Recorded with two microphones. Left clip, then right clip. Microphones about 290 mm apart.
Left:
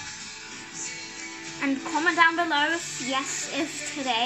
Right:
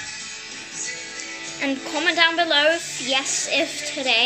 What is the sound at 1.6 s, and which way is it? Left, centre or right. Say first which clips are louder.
A woman's voice: right 2 dB; centre.